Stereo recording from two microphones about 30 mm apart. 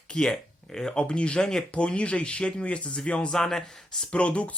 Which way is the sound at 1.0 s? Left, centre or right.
Left.